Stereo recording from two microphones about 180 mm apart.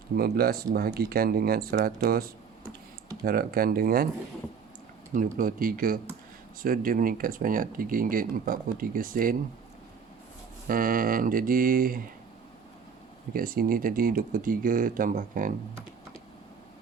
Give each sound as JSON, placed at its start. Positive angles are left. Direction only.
{"t": 0.2, "sound": "speech", "side_deg": -60}
{"t": 5.1, "sound": "speech", "side_deg": -50}
{"t": 10.7, "sound": "speech", "side_deg": -50}
{"t": 13.3, "sound": "speech", "side_deg": -50}